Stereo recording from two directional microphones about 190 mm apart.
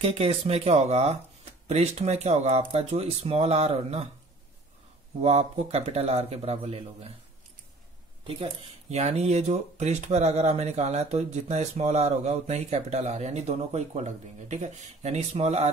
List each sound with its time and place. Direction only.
0.0 s speech: 30° right (ahead or behind)
5.2 s speech: 35° right (ahead or behind)
8.9 s speech: 35° right (ahead or behind)